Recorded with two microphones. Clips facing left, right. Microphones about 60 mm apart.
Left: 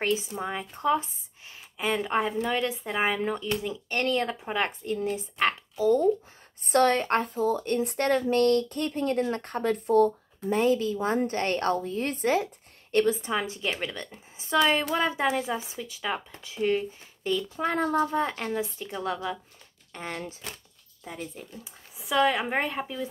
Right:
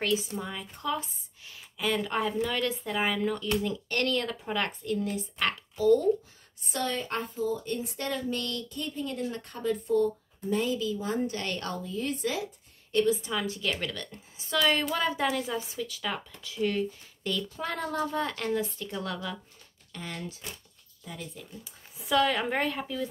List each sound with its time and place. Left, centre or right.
0.0 s speech: left
6.6 s a woman's voice: left
10.5 s a woman's voice: left
13.1 s a woman's voice: left
19.9 s speech: left
21.9 s a woman's voice: centre